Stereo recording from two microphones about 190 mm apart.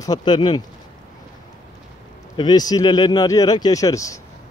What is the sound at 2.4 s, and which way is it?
Speech, 20° left (ahead or behind).